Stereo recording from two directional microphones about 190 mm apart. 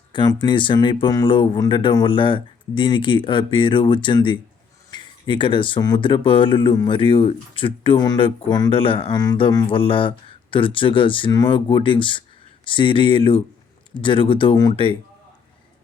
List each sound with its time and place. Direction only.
0.1 s speech: 25° left (ahead or behind)